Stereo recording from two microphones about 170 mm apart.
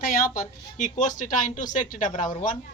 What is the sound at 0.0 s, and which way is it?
A woman's voice, 55° left (ahead or behind).